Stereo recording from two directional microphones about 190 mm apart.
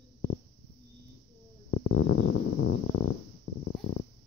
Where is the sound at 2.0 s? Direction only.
90° left.